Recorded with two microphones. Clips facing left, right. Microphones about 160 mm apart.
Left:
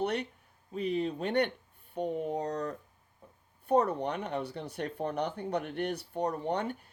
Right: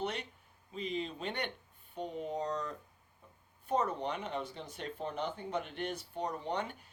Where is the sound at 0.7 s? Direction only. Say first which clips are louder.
Left 7 dB; 60° left (ahead or behind).